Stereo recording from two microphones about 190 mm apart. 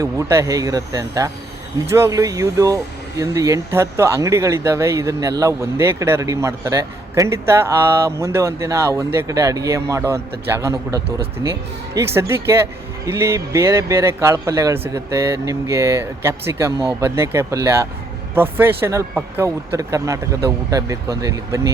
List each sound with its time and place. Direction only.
0.0 s a man's voice: 15° right (ahead or behind)